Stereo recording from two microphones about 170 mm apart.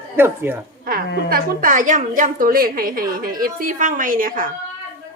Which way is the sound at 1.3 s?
50° right (ahead or behind).